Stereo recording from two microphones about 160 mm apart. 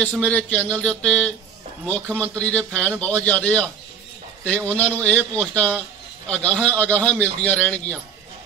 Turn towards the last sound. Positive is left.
turn(degrees=10)  # may be behind; listen again after turning